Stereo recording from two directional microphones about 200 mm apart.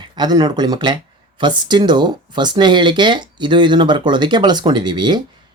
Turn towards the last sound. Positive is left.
turn(degrees=-20)  # may be behind; listen again after turning